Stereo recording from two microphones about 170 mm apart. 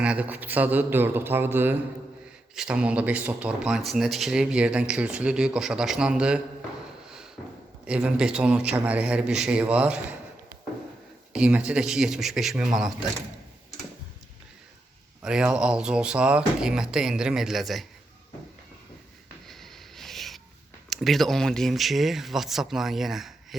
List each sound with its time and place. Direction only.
0.0 s a man's voice: 5° right (ahead or behind)
7.9 s a man's voice: 5° right (ahead or behind)
11.3 s speech: 5° right (ahead or behind)
15.2 s speech: 5° right (ahead or behind)
19.5 s a sound: centre (ahead or behind)
20.9 s speech: centre (ahead or behind)